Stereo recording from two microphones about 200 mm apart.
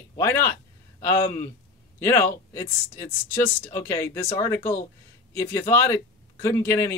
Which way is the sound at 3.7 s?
15° left (ahead or behind).